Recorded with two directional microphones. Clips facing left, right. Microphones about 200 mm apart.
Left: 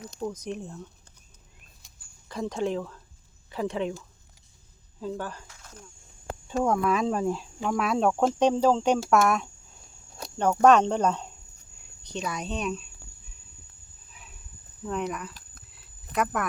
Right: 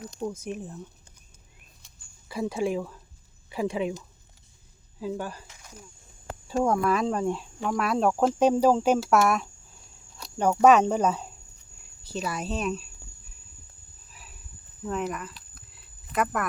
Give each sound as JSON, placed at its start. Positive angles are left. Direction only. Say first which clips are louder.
{"t": 0.2, "sound": "speech", "louder": "even", "side_deg": -10}
{"t": 2.3, "sound": "speech", "louder": "right 1 dB", "side_deg": -10}
{"t": 14.1, "sound": "cricket", "louder": "even", "side_deg": 0}
{"t": 14.8, "sound": "speech", "louder": "even", "side_deg": 0}
{"t": 15.3, "sound": "a sound", "louder": "even", "side_deg": 45}
{"t": 16.1, "sound": "speech", "louder": "even", "side_deg": 0}